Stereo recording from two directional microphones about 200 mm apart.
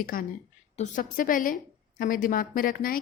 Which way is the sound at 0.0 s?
45° left (ahead or behind).